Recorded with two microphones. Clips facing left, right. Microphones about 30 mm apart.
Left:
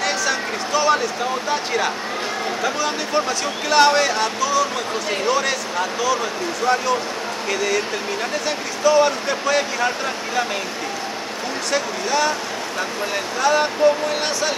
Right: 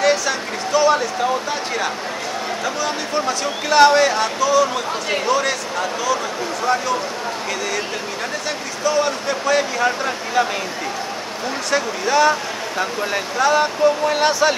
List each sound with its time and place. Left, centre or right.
0.0 s a sound: centre
2.6 s speech: centre
8.5 s speech: centre
11.7 s speech: centre
14.0 s speech: centre